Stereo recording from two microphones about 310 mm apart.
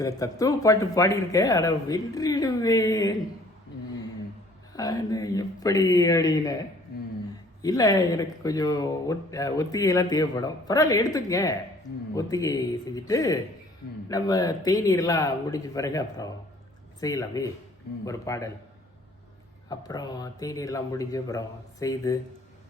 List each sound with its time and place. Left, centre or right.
0.0 s speech: centre
4.8 s speech: centre
6.9 s a sound: left
7.6 s speech: centre
19.7 s speech: centre